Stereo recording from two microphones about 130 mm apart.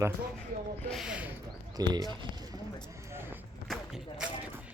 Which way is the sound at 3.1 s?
15° right (ahead or behind).